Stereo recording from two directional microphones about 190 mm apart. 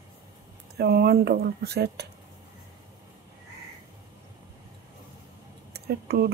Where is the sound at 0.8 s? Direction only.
55° right (ahead or behind).